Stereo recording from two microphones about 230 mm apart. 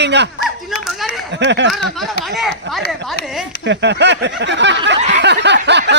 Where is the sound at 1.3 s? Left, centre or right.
Right.